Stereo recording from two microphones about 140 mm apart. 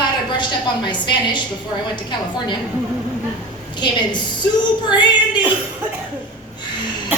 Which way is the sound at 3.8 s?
30° left (ahead or behind).